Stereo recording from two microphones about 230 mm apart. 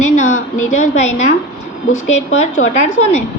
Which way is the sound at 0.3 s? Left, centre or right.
Left.